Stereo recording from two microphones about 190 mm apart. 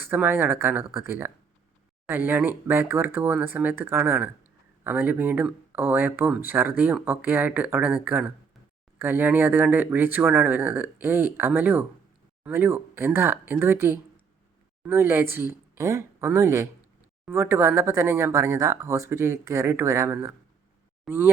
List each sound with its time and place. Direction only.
0.0 s speech: 10° right (ahead or behind)